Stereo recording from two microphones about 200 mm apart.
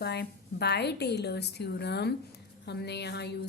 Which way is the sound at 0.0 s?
55° left (ahead or behind).